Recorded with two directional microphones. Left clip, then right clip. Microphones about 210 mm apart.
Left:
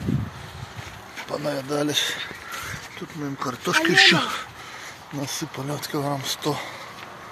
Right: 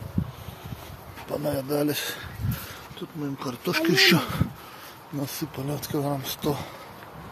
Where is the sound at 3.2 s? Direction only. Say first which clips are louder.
Left 4 dB; 5° right (ahead or behind).